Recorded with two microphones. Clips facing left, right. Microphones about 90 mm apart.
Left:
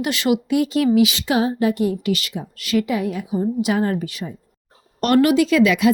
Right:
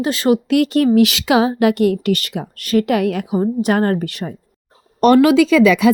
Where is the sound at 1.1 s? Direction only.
90° right; by 2.9 s 45° right (ahead or behind).